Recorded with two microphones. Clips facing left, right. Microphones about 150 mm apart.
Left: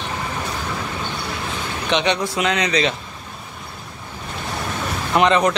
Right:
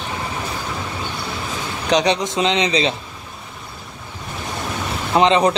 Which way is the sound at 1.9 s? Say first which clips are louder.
Right 3 dB; 35° right (ahead or behind).